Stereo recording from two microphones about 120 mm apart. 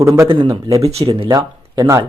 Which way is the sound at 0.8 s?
55° right (ahead or behind).